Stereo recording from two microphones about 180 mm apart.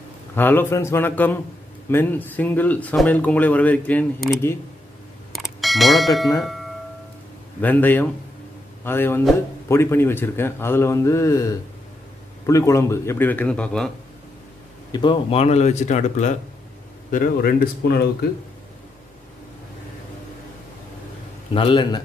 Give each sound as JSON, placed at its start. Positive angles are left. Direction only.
{"t": 0.4, "sound": "speech", "side_deg": 10}
{"t": 5.3, "sound": "a sound", "side_deg": 0}
{"t": 7.6, "sound": "speech", "side_deg": 10}
{"t": 14.9, "sound": "speech", "side_deg": 25}
{"t": 17.1, "sound": "speech", "side_deg": 55}
{"t": 21.5, "sound": "a man's voice", "side_deg": 25}